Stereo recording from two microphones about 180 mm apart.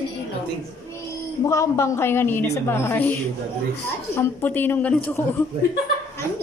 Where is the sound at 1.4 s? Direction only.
15° left (ahead or behind).